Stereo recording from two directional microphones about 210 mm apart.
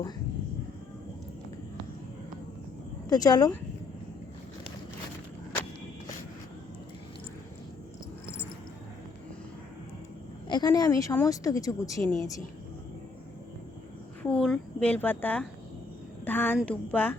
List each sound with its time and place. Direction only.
3.1 s a woman's voice: 20° left (ahead or behind)
10.5 s a woman's voice: 20° left (ahead or behind)
14.2 s a woman's voice: 5° left (ahead or behind)